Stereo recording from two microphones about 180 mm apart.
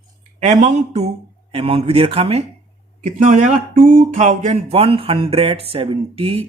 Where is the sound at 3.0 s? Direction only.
45° right (ahead or behind).